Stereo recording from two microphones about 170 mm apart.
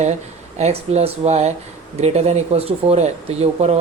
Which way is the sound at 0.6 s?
40° right (ahead or behind).